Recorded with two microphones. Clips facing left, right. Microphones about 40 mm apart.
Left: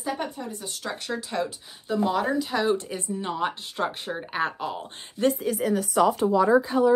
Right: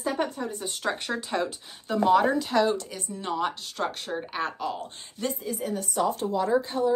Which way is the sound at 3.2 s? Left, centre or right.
Centre.